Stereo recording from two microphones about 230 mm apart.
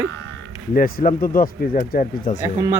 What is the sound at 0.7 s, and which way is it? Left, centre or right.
Speech, left.